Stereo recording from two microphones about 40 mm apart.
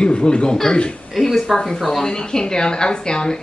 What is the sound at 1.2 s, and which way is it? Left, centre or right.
Speech, centre.